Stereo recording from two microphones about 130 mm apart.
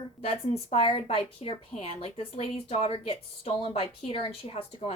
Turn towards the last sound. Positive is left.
turn(degrees=50)  # may be behind; listen again after turning